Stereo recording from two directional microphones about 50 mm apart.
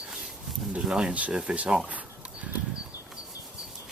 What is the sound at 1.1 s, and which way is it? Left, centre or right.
Speech, right.